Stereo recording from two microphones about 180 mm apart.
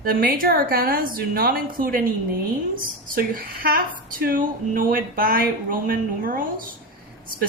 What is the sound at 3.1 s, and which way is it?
Speech, 55° right (ahead or behind).